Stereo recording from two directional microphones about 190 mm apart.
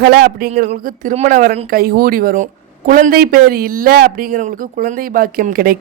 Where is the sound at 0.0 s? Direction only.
55° right (ahead or behind).